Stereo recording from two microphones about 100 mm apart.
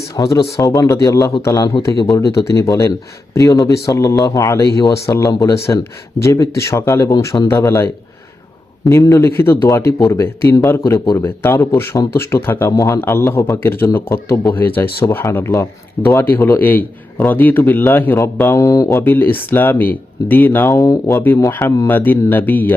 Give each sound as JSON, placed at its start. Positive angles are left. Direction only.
{"t": 0.1, "sound": "speech", "side_deg": 35}
{"t": 8.9, "sound": "speech", "side_deg": 30}
{"t": 12.7, "sound": "speech", "side_deg": 35}
{"t": 13.0, "sound": "speech", "side_deg": 25}
{"t": 16.3, "sound": "speech", "side_deg": 20}
{"t": 21.8, "sound": "speech", "side_deg": 20}